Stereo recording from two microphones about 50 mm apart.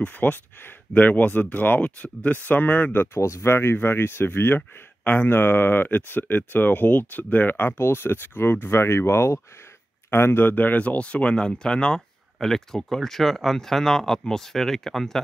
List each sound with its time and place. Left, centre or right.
0.0 s speech: left
3.2 s speech: left
4.6 s speech: left
10.1 s speech: left; by 15.1 s centre